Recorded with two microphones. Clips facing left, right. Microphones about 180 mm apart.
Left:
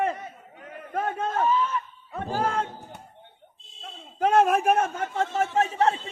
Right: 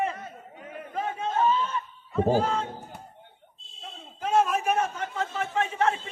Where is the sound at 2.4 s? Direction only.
60° left (ahead or behind).